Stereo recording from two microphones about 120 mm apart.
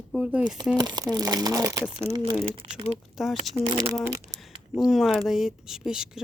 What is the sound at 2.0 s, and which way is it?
Speech, 60° right (ahead or behind).